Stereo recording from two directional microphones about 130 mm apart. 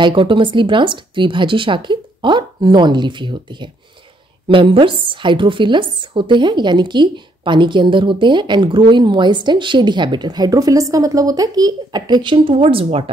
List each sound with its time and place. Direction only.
0.0 s speech: 40° right (ahead or behind)